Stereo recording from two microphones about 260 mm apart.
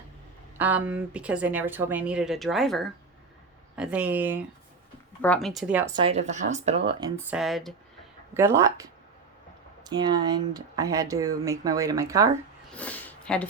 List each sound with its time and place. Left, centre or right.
0.6 s speech: centre
5.9 s speech: right
7.3 s speech: centre
12.7 s a sound: centre